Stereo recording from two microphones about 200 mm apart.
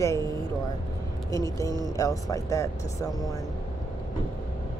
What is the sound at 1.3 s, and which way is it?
Speech, 15° left (ahead or behind).